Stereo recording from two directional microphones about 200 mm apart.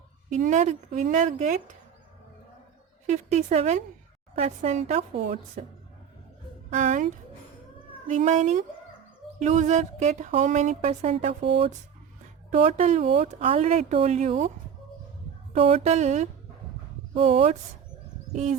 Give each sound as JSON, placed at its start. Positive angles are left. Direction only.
{"t": 0.3, "sound": "speech", "side_deg": -35}
{"t": 3.1, "sound": "speech", "side_deg": -35}
{"t": 6.7, "sound": "speech", "side_deg": -40}
{"t": 15.5, "sound": "speech", "side_deg": -30}